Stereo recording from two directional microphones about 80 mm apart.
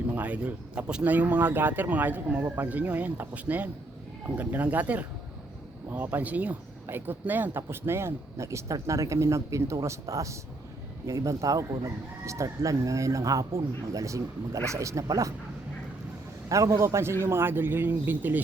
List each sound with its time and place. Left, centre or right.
0.1 s speech: centre; by 15.3 s right
16.5 s speech: right